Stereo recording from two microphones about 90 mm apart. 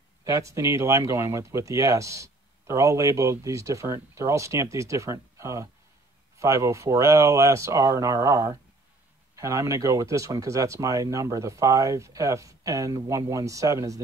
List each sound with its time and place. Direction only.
0.2 s speech: 35° right (ahead or behind)